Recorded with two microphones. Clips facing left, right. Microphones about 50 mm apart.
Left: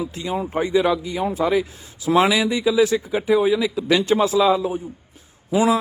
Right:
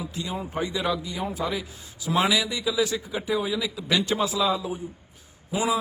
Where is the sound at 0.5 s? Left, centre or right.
Left.